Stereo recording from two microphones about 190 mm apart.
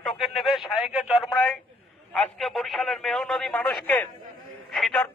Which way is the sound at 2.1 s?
Centre (ahead or behind).